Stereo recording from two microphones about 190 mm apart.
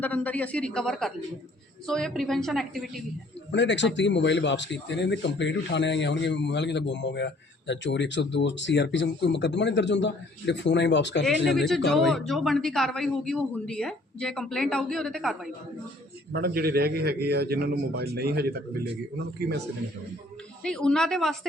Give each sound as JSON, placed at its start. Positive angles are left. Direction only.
{"t": 0.0, "sound": "a woman's voice", "side_deg": 10}
{"t": 3.5, "sound": "a man's voice", "side_deg": 70}
{"t": 11.5, "sound": "a man's voice", "side_deg": 0}
{"t": 16.3, "sound": "a man's voice", "side_deg": -55}
{"t": 20.6, "sound": "a man's voice", "side_deg": 5}